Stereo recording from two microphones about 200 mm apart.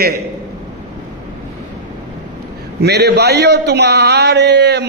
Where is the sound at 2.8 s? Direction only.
55° right (ahead or behind).